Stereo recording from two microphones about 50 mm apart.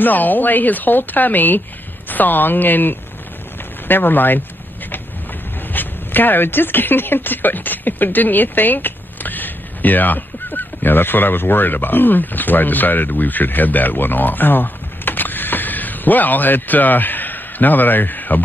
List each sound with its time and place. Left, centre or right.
0.0 s speech: left
5.7 s speech: left